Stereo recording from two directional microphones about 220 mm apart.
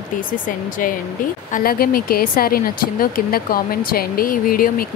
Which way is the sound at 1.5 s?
40° left (ahead or behind).